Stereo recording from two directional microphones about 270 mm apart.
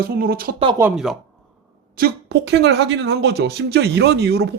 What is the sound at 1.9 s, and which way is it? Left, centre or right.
Speech, right.